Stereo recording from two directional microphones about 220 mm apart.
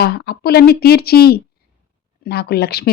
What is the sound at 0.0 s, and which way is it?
Speech, 45° left (ahead or behind).